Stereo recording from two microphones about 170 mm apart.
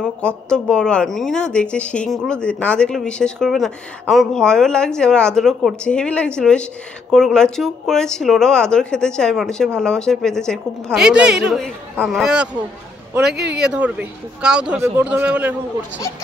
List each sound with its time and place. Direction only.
0.0 s speech: 5° left (ahead or behind)
13.5 s speech: 5° right (ahead or behind)